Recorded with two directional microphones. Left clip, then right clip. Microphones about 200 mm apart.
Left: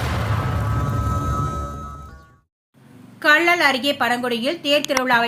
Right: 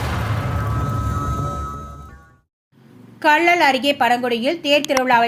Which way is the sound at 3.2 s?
15° right (ahead or behind).